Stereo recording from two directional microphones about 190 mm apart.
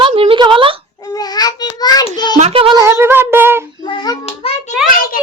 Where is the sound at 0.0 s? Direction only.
30° right (ahead or behind).